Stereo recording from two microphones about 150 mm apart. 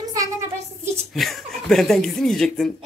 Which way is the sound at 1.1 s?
Centre (ahead or behind).